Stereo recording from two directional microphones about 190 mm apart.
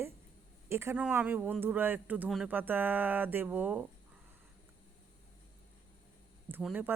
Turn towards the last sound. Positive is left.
turn(degrees=-10)  # may be behind; listen again after turning